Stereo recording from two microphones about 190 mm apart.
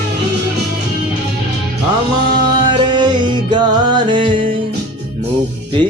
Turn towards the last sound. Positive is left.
turn(degrees=-25)  # may be behind; listen again after turning